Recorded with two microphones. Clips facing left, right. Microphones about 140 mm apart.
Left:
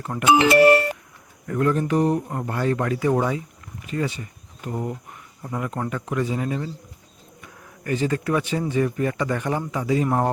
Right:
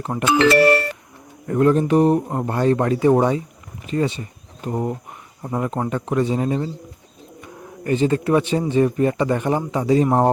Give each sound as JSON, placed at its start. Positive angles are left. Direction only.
{"t": 0.0, "sound": "speech", "side_deg": -25}
{"t": 1.5, "sound": "speech", "side_deg": -25}
{"t": 2.2, "sound": "speech", "side_deg": -30}